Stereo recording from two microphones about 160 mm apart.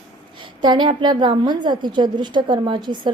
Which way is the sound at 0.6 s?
25° right (ahead or behind).